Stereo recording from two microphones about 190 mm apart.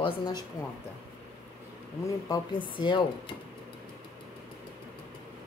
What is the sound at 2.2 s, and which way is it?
Speech, 25° left (ahead or behind).